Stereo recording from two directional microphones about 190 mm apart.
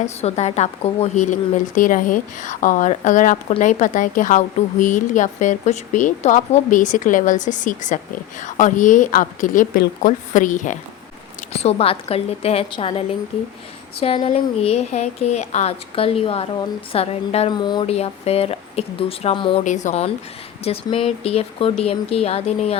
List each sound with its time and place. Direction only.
0.0 s a woman's voice: 35° left (ahead or behind)
11.5 s a woman's voice: 30° left (ahead or behind)
19.6 s a woman's voice: 40° left (ahead or behind)